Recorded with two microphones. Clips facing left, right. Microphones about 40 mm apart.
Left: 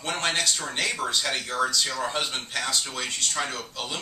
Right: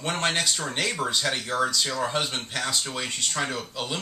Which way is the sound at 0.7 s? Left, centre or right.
Centre.